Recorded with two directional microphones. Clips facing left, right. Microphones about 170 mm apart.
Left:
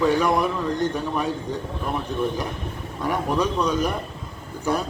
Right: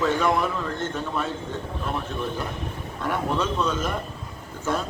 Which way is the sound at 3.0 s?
15° left (ahead or behind).